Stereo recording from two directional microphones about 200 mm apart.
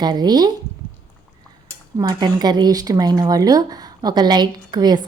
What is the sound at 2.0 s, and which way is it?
Speech, 20° right (ahead or behind).